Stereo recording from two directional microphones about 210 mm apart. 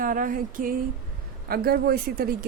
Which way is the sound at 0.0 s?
40° right (ahead or behind).